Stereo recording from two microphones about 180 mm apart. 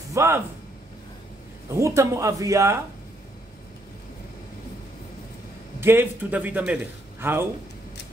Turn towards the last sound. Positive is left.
turn(degrees=-10)  # may be behind; listen again after turning